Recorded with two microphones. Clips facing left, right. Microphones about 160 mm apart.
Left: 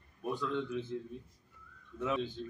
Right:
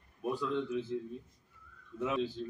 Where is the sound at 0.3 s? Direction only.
5° right (ahead or behind).